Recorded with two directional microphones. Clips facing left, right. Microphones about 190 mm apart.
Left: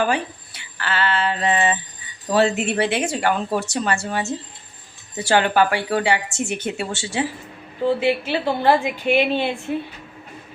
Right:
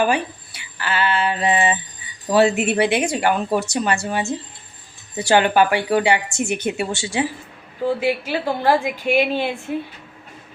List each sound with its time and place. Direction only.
0.0 s speech: 15° right (ahead or behind)